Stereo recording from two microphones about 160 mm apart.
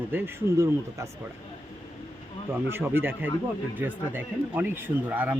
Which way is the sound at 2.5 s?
15° right (ahead or behind).